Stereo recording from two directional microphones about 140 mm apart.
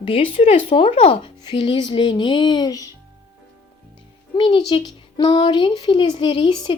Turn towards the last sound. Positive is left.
turn(degrees=35)  # may be behind; listen again after turning